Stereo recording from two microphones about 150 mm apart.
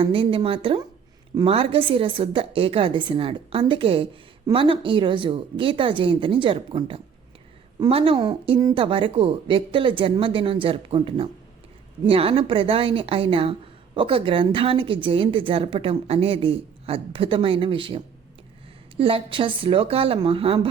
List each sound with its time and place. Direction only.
0.0 s speech: 35° right (ahead or behind)